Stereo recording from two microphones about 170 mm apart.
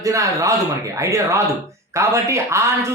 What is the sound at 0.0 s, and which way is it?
Speech, 20° right (ahead or behind).